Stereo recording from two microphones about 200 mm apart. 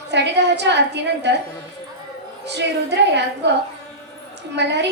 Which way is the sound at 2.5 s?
60° right (ahead or behind).